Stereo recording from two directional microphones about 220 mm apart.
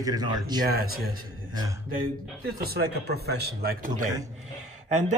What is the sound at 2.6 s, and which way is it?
A man's voice, 45° right (ahead or behind).